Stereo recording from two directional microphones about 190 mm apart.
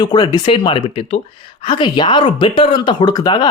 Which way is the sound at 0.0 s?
20° left (ahead or behind).